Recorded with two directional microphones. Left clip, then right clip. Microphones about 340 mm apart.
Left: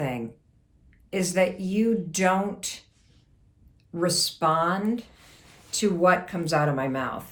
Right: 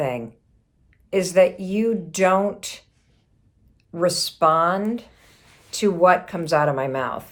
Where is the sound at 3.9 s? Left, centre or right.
Centre.